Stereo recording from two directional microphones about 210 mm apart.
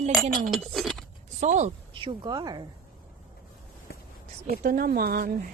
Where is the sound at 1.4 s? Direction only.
35° right (ahead or behind).